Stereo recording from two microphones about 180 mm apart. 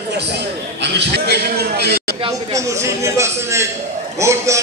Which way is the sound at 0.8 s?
70° right (ahead or behind).